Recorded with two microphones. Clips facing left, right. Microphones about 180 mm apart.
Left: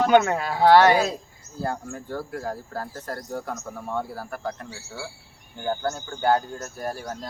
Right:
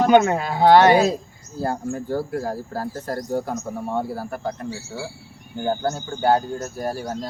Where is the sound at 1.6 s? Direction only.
35° right (ahead or behind).